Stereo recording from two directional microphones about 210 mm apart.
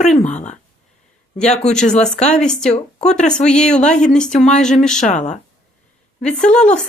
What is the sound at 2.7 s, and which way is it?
Speech, 30° left (ahead or behind).